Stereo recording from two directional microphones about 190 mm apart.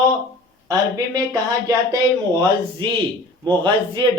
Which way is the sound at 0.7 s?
20° right (ahead or behind).